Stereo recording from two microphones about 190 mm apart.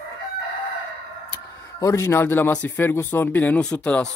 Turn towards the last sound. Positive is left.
turn(degrees=5)  # may be behind; listen again after turning